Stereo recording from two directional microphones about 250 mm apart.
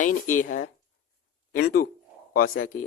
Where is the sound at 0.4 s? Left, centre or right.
Left.